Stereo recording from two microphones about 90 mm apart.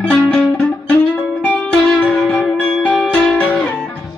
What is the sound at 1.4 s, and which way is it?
Music, 10° left (ahead or behind).